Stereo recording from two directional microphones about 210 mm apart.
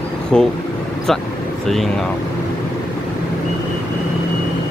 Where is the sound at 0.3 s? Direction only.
5° left (ahead or behind).